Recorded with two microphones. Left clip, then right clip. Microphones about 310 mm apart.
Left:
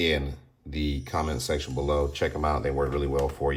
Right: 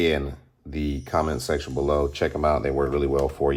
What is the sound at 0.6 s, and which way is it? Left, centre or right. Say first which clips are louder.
Speech: right 2 dB; centre.